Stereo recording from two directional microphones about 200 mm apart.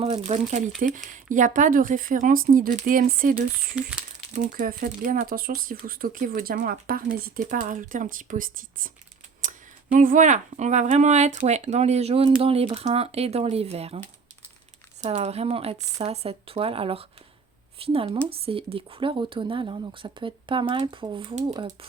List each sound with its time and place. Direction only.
0.0 s speech: 35° right (ahead or behind)
15.0 s speech: 35° right (ahead or behind)